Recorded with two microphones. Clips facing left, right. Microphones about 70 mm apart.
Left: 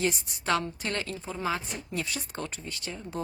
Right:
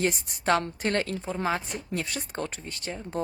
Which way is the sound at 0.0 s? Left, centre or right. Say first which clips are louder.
Right 3 dB; right.